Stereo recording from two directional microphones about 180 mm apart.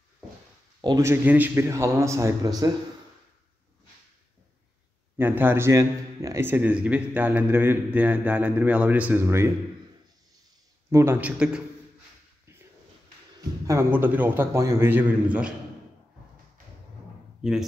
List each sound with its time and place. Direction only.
0.7 s a man's voice: 20° right (ahead or behind)
5.1 s a man's voice: 10° right (ahead or behind)
10.9 s a man's voice: 15° right (ahead or behind)
13.7 s a man's voice: 10° right (ahead or behind)
17.4 s speech: 5° right (ahead or behind)